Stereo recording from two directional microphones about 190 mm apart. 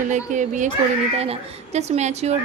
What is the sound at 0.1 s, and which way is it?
A woman's voice, 40° right (ahead or behind).